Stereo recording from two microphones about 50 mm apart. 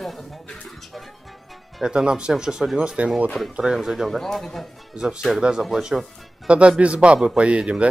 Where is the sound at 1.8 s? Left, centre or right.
Centre.